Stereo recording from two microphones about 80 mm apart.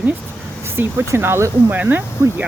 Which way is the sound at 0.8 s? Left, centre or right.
Right.